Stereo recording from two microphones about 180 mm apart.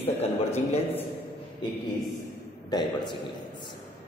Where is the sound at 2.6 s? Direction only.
25° left (ahead or behind).